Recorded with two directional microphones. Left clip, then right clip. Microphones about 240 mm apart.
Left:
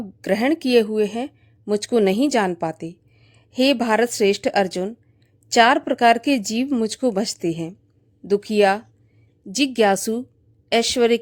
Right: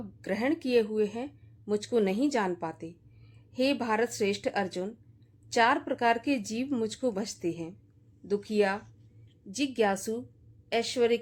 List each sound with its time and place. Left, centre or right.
0.2 s a woman's voice: left